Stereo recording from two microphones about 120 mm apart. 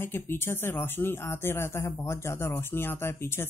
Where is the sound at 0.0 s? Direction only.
20° left (ahead or behind).